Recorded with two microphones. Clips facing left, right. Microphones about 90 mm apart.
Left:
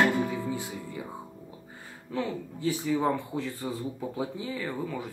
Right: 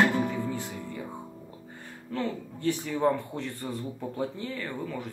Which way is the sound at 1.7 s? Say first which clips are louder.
Even; 5° left (ahead or behind).